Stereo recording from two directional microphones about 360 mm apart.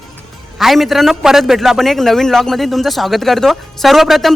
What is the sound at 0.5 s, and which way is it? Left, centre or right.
A man's voice, centre.